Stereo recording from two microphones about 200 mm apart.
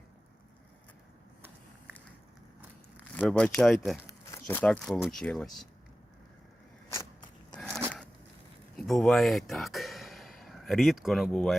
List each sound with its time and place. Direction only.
3.2 s speech: 5° left (ahead or behind)
6.9 s biting: 15° left (ahead or behind)
7.7 s a sound: 10° right (ahead or behind)
8.9 s speech: centre (ahead or behind)